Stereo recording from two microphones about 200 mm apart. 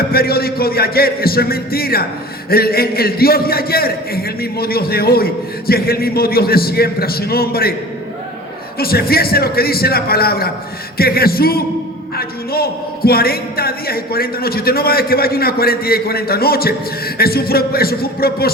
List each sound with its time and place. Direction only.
0.1 s a man's voice: 50° left (ahead or behind)
8.8 s a man's voice: 50° left (ahead or behind)